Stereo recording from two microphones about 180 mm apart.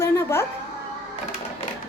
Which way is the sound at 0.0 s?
15° left (ahead or behind).